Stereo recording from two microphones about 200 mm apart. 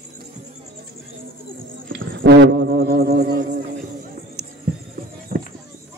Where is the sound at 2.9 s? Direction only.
50° right (ahead or behind).